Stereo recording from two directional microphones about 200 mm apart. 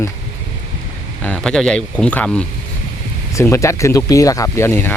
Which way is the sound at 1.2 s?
5° left (ahead or behind).